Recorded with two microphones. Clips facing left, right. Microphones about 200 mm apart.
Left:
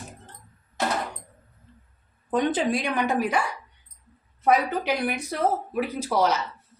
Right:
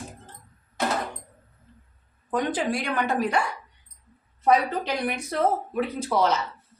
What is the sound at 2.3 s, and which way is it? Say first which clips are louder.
Speech: left 2 dB; 20° left (ahead or behind).